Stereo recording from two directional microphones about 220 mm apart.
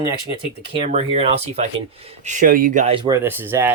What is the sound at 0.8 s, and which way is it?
Speech, 30° right (ahead or behind).